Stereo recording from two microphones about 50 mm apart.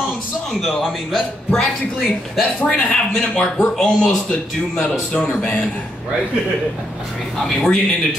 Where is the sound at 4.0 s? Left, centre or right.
Centre.